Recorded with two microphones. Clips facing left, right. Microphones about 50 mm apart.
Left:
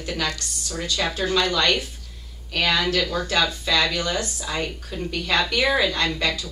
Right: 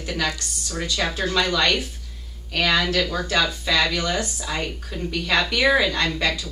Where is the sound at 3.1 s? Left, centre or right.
Centre.